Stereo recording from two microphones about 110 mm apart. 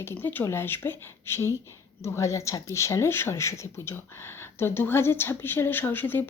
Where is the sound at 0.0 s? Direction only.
20° left (ahead or behind).